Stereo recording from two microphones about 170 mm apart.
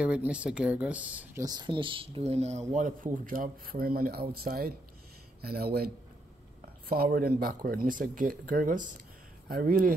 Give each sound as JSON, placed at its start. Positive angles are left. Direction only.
{"t": 0.0, "sound": "speech", "side_deg": -5}
{"t": 1.4, "sound": "speech", "side_deg": -25}
{"t": 2.7, "sound": "speech", "side_deg": -50}
{"t": 6.9, "sound": "speech", "side_deg": -60}